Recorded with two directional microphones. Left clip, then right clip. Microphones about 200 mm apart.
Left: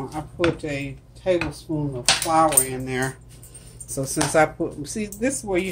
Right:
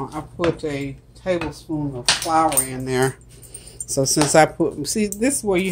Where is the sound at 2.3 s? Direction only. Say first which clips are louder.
Even; 20° right (ahead or behind).